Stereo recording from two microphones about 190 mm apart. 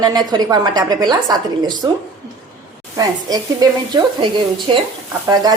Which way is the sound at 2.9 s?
20° right (ahead or behind).